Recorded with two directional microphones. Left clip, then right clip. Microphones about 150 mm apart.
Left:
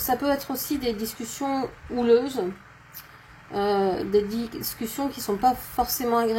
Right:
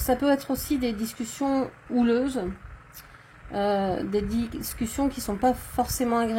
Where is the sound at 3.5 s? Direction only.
50° right (ahead or behind).